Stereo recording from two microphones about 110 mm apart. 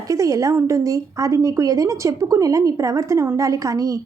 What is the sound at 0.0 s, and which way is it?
A woman's voice, 30° right (ahead or behind).